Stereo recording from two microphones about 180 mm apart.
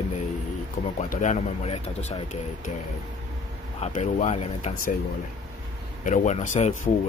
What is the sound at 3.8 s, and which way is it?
Speech, 40° left (ahead or behind).